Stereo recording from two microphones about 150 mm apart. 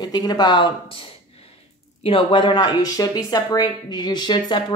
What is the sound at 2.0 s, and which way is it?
Speech, 35° left (ahead or behind).